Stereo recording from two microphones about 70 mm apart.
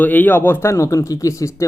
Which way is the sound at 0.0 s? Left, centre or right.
Left.